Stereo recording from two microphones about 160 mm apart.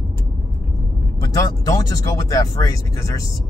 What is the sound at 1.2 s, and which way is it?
Speech, 20° left (ahead or behind).